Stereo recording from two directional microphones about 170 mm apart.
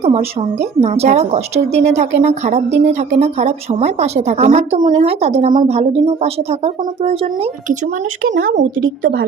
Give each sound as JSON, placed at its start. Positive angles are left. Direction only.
{"t": 0.0, "sound": "a woman's voice", "side_deg": -35}
{"t": 8.3, "sound": "speech", "side_deg": -50}